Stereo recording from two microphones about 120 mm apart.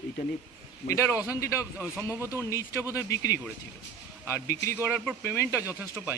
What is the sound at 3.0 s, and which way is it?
A man's voice, 25° left (ahead or behind).